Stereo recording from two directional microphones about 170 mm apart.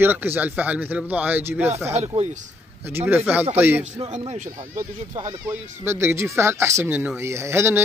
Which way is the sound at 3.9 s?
40° right (ahead or behind).